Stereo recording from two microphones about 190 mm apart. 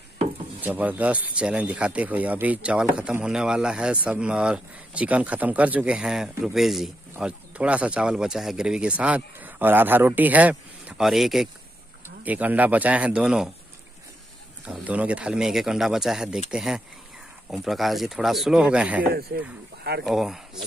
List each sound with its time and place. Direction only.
0.6 s speech: 10° right (ahead or behind)
14.6 s speech: 5° right (ahead or behind)
19.1 s speech: 55° right (ahead or behind)
20.1 s speech: centre (ahead or behind)